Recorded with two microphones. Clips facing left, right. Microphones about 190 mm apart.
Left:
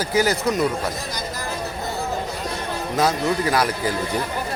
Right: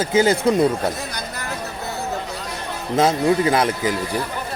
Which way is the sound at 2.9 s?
25° right (ahead or behind).